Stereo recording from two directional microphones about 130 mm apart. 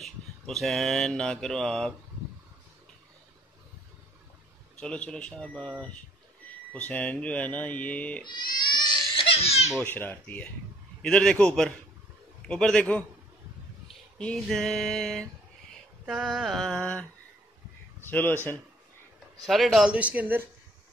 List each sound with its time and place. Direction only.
0.0 s mantra: centre (ahead or behind)
4.7 s speech: 10° left (ahead or behind)
8.3 s crying: 35° left (ahead or behind)
9.8 s speech: 15° left (ahead or behind)
14.1 s a sound: 5° left (ahead or behind)
18.0 s speech: 15° left (ahead or behind)
19.4 s speech: centre (ahead or behind)